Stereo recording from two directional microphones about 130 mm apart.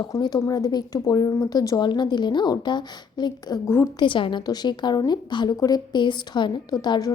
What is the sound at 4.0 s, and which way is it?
Speech, 40° left (ahead or behind).